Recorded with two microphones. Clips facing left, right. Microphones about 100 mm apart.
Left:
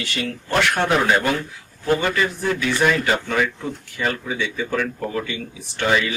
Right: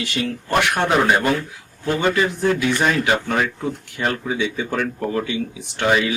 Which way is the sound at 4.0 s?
20° right (ahead or behind).